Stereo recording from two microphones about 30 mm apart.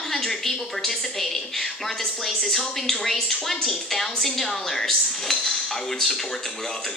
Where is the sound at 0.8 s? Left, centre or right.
Centre.